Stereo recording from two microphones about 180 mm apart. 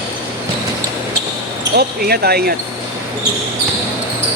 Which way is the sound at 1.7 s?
60° right (ahead or behind).